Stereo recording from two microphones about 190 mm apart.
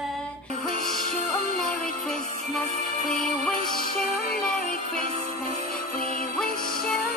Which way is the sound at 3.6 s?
50° left (ahead or behind).